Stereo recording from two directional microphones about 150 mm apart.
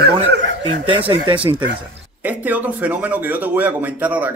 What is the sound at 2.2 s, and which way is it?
A man's voice, 10° right (ahead or behind).